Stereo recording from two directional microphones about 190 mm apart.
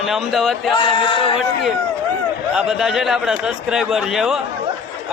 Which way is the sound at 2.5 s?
5° right (ahead or behind).